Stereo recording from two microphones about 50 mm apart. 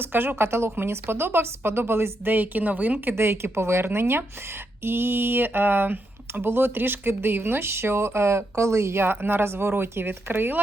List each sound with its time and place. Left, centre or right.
0.0 s speech: right
2.3 s a woman's voice: right
3.2 s speech: right
9.0 s speech: right